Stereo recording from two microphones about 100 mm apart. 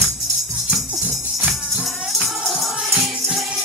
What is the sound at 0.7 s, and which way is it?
Music, 25° right (ahead or behind).